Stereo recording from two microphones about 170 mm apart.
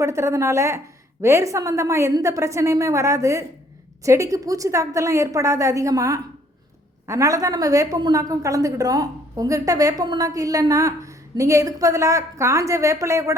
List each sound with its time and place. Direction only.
0.0 s a woman's voice: 15° right (ahead or behind)